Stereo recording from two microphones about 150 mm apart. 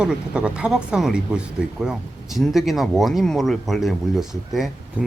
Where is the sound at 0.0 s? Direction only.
5° right (ahead or behind).